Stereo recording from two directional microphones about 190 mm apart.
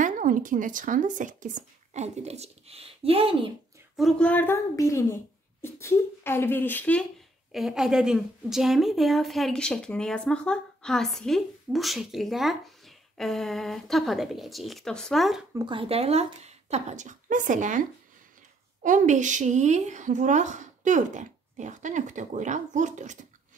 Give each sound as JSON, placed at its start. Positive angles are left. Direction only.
{"t": 0.0, "sound": "a woman's voice", "side_deg": -45}
{"t": 3.9, "sound": "speech", "side_deg": 0}
{"t": 15.5, "sound": "a woman's voice", "side_deg": -25}